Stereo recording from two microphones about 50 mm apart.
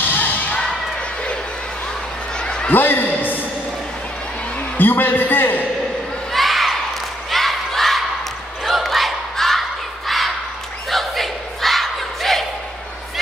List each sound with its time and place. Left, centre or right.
0.1 s basketball bounce: left
2.3 s a sound: centre
2.7 s a man's voice: left
4.7 s a man's voice: left
6.3 s a sound: centre
8.6 s battle cry: centre